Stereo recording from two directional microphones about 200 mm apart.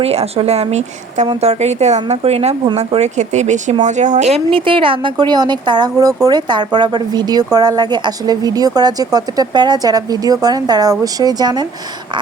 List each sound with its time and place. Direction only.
0.0 s speech: 30° right (ahead or behind)